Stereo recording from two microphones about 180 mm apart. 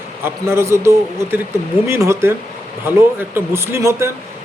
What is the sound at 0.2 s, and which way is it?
A man's voice, 15° right (ahead or behind).